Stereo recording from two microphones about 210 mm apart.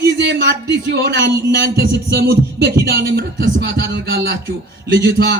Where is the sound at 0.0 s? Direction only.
55° right (ahead or behind).